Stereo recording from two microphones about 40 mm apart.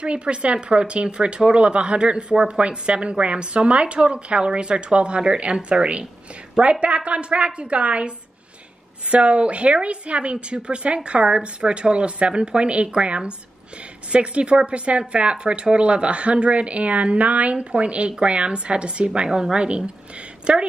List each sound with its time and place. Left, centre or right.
0.0 s a woman's voice: right
9.1 s speech: right